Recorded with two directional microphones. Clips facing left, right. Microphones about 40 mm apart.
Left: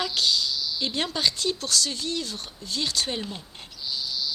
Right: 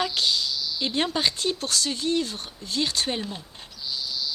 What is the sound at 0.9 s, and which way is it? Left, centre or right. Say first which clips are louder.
Speech: right 2 dB; centre.